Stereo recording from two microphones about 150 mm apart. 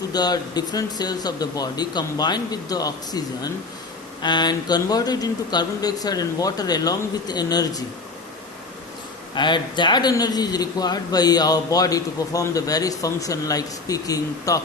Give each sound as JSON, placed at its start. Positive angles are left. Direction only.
{"t": 0.1, "sound": "a man's voice", "side_deg": 25}
{"t": 9.3, "sound": "a man's voice", "side_deg": 30}